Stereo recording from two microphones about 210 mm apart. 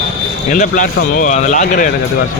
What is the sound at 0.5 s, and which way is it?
Speech, 35° left (ahead or behind).